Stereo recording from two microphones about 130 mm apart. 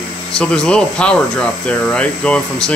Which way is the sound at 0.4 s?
5° left (ahead or behind).